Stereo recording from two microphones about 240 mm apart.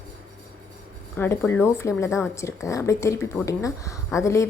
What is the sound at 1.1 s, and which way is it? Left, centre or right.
A woman's voice, centre.